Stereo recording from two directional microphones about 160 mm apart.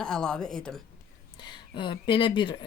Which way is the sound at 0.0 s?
5° left (ahead or behind).